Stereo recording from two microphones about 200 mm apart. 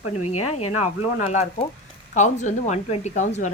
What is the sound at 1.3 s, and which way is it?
A woman's voice, 35° left (ahead or behind).